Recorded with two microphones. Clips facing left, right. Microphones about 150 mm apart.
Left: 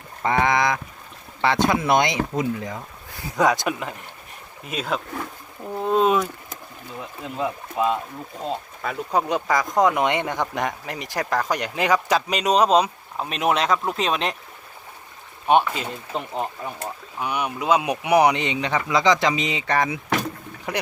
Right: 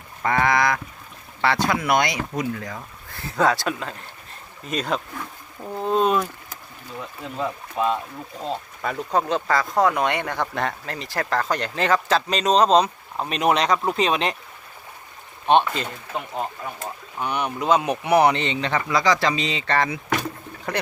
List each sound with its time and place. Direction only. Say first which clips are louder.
0.2 s speech: even; 20° left (ahead or behind)
4.6 s speech: right 2 dB; 5° left (ahead or behind)
5.7 s a sound: left 1 dB; 5° left (ahead or behind)
7.0 s speech: left 1 dB; 5° left (ahead or behind)
9.2 s speech: even; 15° left (ahead or behind)
15.5 s speech: even; 10° left (ahead or behind)
17.2 s speech: right 1 dB; 10° left (ahead or behind)